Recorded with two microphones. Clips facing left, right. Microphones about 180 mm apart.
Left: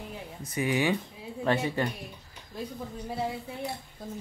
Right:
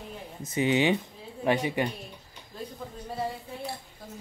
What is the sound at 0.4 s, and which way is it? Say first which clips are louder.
Speech: right 3 dB; 25° right (ahead or behind).